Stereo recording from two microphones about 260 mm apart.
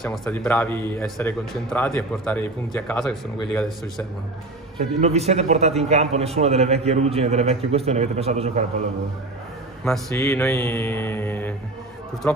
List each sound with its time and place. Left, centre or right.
0.0 s a man's voice: centre
5.0 s a man's voice: right
9.8 s a man's voice: centre